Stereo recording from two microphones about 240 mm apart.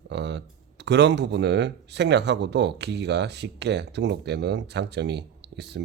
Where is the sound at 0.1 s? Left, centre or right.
Right.